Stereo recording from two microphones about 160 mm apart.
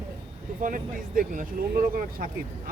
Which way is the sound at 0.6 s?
55° right (ahead or behind).